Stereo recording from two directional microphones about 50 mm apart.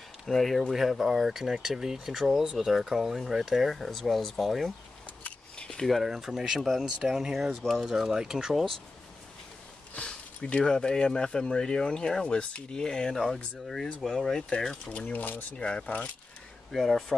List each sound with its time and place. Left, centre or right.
0.3 s speech: centre
5.2 s a sound: left
5.8 s speech: centre
7.8 s speech: centre
9.9 s speech: left
15.5 s speech: centre
16.7 s speech: centre